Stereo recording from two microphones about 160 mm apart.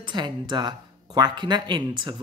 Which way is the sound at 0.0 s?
30° right (ahead or behind).